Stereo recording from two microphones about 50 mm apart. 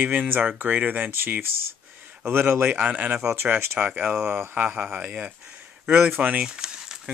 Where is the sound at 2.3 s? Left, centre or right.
Right.